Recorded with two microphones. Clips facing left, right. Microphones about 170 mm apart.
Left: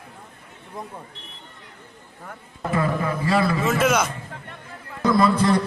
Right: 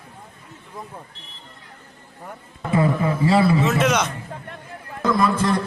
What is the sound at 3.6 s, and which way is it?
Speech, centre (ahead or behind).